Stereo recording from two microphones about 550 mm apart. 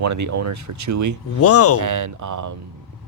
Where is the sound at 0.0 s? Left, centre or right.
Right.